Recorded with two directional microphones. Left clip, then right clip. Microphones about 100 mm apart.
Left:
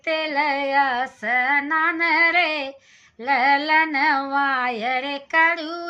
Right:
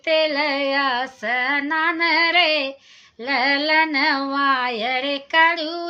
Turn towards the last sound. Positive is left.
turn(degrees=-15)  # may be behind; listen again after turning